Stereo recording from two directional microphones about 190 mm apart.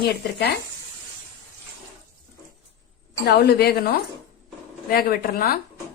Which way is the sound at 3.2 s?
55° left (ahead or behind).